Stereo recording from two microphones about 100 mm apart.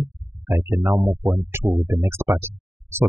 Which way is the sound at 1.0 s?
10° right (ahead or behind).